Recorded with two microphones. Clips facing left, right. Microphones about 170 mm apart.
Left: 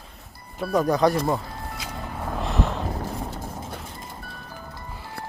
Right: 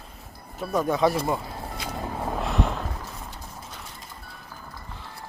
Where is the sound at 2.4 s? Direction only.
Centre (ahead or behind).